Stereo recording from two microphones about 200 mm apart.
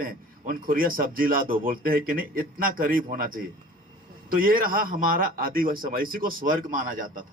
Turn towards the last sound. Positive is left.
turn(degrees=-45)  # may be behind; listen again after turning